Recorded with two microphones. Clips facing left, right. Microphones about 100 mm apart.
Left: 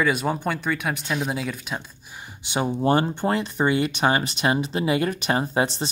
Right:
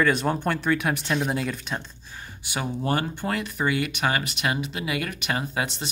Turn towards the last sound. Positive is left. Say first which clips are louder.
# left 6 dB
turn(degrees=30)  # may be behind; listen again after turning